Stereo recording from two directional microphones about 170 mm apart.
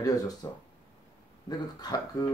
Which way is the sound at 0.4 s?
20° left (ahead or behind).